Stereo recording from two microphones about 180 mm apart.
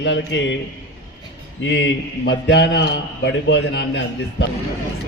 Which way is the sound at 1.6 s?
70° left (ahead or behind).